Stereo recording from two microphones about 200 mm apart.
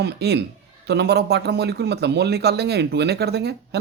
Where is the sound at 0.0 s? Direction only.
55° right (ahead or behind).